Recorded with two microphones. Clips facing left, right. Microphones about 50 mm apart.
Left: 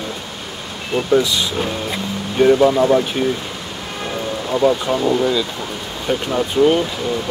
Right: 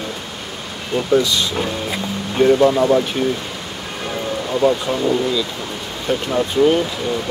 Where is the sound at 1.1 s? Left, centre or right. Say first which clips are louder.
Even; centre.